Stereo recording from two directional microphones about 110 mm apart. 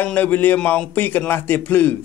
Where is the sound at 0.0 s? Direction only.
15° left (ahead or behind).